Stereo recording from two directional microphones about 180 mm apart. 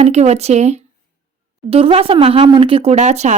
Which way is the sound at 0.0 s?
35° right (ahead or behind).